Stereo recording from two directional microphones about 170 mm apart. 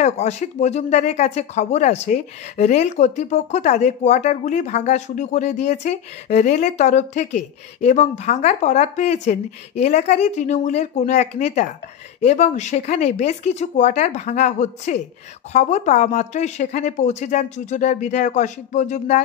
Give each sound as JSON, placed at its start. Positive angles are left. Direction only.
{"t": 0.0, "sound": "speech", "side_deg": 40}